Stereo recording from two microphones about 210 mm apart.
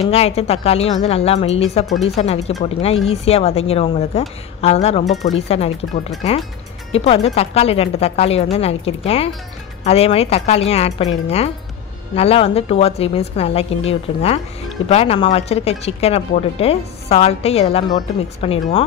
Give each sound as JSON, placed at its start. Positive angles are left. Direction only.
{"t": 0.0, "sound": "speech", "side_deg": 30}